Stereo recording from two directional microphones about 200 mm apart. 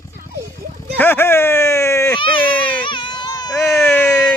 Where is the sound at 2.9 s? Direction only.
25° left (ahead or behind).